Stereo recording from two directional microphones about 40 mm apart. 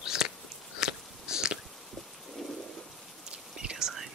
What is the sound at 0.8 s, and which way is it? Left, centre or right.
Biting, centre.